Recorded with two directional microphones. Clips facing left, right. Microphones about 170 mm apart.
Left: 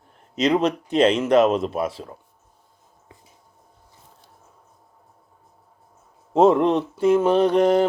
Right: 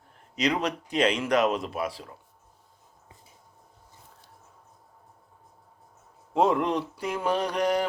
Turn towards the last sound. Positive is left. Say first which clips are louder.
# left 9 dB
turn(degrees=25)  # may be behind; listen again after turning